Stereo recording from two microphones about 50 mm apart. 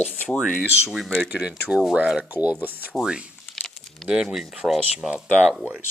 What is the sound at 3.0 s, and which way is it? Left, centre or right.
Speech, centre.